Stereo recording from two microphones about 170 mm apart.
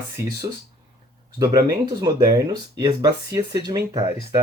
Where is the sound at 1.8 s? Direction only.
20° right (ahead or behind).